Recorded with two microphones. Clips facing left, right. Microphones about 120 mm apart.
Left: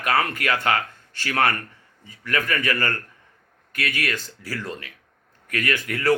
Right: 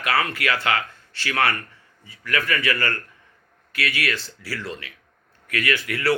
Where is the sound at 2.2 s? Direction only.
40° left (ahead or behind).